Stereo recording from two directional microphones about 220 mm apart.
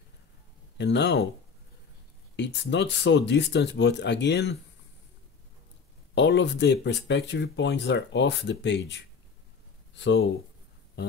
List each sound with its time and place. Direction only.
0.7 s speech: 50° left (ahead or behind)
2.3 s speech: 55° left (ahead or behind)
6.1 s speech: 55° left (ahead or behind)